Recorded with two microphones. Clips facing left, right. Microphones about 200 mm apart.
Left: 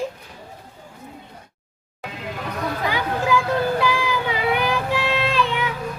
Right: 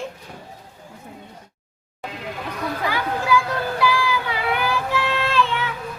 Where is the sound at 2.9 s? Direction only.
20° left (ahead or behind).